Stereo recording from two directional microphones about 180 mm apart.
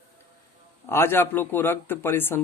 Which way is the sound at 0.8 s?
15° left (ahead or behind).